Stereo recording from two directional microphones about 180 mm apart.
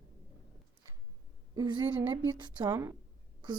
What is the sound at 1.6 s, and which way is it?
Speech, 25° right (ahead or behind).